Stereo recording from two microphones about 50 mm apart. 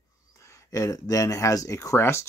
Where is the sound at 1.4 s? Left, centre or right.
Left.